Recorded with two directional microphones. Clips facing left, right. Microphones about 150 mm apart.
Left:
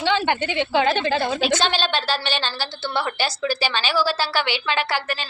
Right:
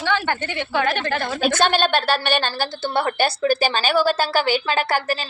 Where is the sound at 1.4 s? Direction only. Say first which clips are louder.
Right 3 dB; 50° right (ahead or behind).